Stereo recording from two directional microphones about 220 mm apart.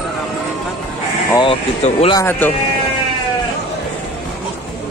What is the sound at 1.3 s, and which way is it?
Speech, 25° left (ahead or behind).